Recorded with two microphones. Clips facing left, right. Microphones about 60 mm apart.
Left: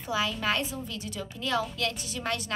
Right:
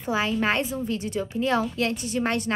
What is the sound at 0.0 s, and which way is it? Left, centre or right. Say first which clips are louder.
A woman's voice: right 5 dB; right.